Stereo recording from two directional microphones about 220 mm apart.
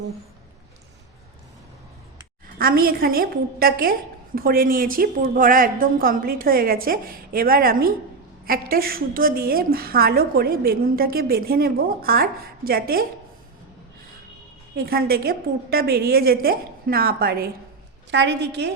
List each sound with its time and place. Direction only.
2.6 s a woman's voice: 40° right (ahead or behind)
14.8 s a woman's voice: 45° right (ahead or behind)